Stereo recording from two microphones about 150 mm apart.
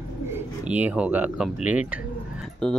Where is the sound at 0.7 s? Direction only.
10° right (ahead or behind).